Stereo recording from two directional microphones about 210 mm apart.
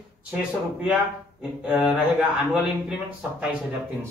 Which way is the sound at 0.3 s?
5° right (ahead or behind).